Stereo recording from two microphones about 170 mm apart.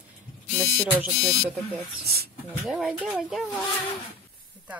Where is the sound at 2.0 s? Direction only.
65° right (ahead or behind).